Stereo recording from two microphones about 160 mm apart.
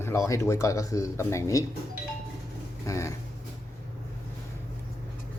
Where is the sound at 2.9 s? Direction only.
20° left (ahead or behind).